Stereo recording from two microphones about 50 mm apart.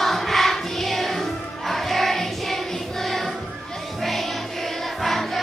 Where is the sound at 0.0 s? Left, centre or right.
Centre.